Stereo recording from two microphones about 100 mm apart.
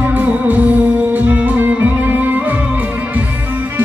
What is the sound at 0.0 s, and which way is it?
Music, 15° right (ahead or behind).